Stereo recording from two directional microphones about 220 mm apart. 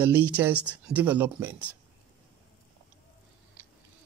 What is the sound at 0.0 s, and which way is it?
Speech, 5° right (ahead or behind).